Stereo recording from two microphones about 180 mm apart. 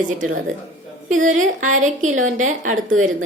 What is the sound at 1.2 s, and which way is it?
A woman's voice, 45° right (ahead or behind).